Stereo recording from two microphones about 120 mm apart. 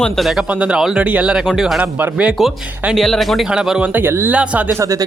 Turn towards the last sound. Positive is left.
turn(degrees=-25)  # may be behind; listen again after turning